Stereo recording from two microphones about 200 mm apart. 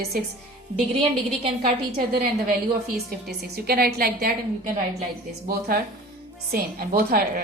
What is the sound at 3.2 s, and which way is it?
Speech, 50° right (ahead or behind).